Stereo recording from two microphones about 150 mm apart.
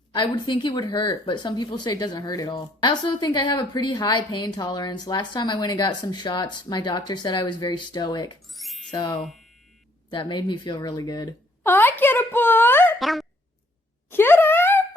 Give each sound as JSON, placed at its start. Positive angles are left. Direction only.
{"t": 0.1, "sound": "speech", "side_deg": 30}
{"t": 8.5, "sound": "music", "side_deg": 0}
{"t": 8.9, "sound": "speech", "side_deg": 30}
{"t": 9.1, "sound": "speech", "side_deg": 0}
{"t": 10.1, "sound": "speech", "side_deg": 30}
{"t": 11.6, "sound": "speech", "side_deg": 15}
{"t": 13.0, "sound": "speech", "side_deg": 0}
{"t": 14.1, "sound": "a sound", "side_deg": 15}